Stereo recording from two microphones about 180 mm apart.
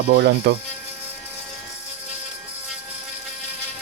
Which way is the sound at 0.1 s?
65° right (ahead or behind).